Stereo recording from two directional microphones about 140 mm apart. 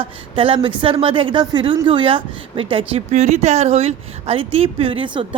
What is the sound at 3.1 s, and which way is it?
Speech, 55° right (ahead or behind).